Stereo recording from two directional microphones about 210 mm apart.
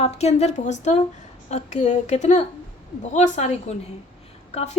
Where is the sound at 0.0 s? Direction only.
30° left (ahead or behind).